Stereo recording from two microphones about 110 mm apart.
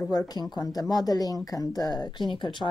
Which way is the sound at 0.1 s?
35° left (ahead or behind).